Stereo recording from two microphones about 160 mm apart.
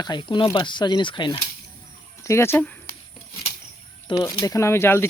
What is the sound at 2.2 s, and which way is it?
Speech, 15° left (ahead or behind).